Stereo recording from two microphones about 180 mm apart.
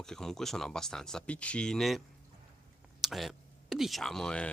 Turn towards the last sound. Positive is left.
turn(degrees=5)  # may be behind; listen again after turning